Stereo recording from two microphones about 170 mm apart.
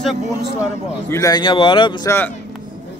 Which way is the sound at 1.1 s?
20° left (ahead or behind).